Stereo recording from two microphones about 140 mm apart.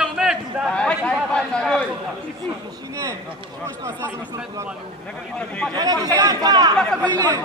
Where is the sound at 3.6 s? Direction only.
20° right (ahead or behind).